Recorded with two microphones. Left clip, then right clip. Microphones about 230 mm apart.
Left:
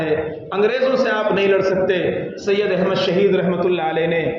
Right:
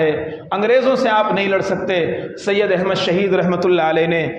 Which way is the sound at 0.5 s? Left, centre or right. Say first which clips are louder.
Right 3 dB; right.